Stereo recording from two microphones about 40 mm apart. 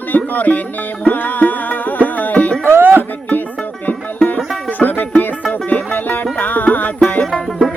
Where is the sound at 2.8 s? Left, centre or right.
Right.